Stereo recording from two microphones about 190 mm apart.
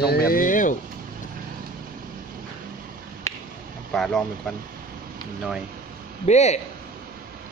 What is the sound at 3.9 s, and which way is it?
Speech, centre (ahead or behind).